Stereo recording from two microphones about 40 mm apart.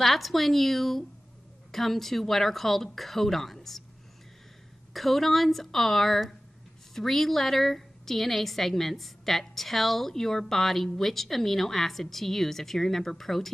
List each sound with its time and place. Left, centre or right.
0.0 s a woman's voice: centre
4.9 s a woman's voice: centre